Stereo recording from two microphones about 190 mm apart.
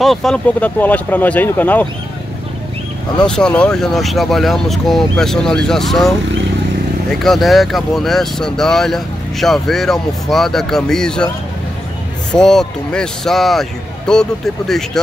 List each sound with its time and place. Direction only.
0.0 s speech: centre (ahead or behind)
3.2 s speech: 5° left (ahead or behind)
12.3 s speech: 5° left (ahead or behind)